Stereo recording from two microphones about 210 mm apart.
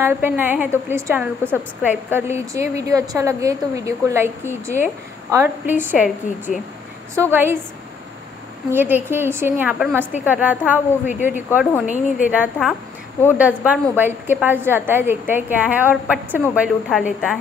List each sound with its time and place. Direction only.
0.0 s a woman's voice: 10° right (ahead or behind)
8.7 s a woman's voice: 10° right (ahead or behind)